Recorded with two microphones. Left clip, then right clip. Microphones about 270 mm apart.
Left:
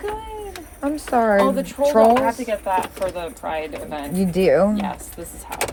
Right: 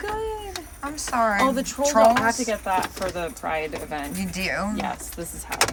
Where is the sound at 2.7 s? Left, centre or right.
Right.